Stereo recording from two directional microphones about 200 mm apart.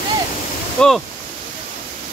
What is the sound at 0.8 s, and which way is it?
Speech, 5° left (ahead or behind).